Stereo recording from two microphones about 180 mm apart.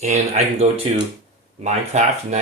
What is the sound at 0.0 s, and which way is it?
Speech, 40° right (ahead or behind).